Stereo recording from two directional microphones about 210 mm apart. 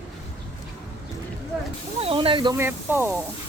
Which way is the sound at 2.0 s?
25° right (ahead or behind).